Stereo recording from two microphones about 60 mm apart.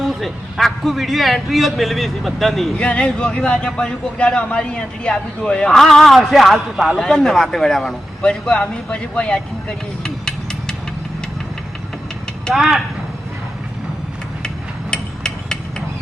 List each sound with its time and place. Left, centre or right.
0.1 s a man's voice: centre
2.7 s a man's voice: centre
10.0 s a sound: centre
12.5 s speech: centre
14.4 s hammer: centre